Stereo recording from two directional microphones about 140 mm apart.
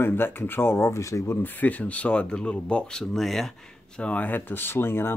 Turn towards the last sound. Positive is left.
turn(degrees=15)  # may be behind; listen again after turning